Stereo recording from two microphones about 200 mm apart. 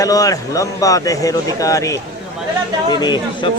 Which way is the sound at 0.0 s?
15° left (ahead or behind).